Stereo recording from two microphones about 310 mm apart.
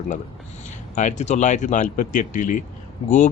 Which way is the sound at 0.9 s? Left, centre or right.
Left.